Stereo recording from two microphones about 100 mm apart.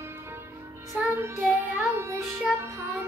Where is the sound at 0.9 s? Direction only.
25° right (ahead or behind).